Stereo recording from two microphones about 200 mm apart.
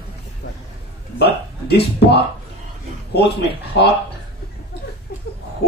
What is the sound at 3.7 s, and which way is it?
Speech, 60° left (ahead or behind).